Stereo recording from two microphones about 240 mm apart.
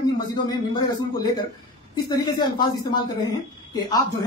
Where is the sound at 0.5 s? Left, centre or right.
Centre.